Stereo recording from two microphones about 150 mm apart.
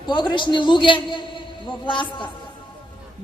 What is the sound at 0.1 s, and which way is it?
A woman's voice, 30° left (ahead or behind).